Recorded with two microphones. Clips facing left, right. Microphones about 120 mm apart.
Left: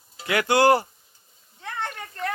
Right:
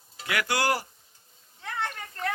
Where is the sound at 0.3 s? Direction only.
25° left (ahead or behind).